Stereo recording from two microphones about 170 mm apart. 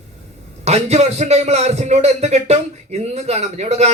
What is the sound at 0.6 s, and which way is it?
A man's voice, 40° right (ahead or behind).